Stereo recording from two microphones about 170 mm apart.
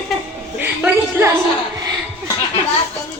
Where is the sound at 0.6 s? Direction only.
10° right (ahead or behind).